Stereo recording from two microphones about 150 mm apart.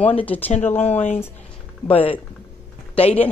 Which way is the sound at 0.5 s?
50° left (ahead or behind).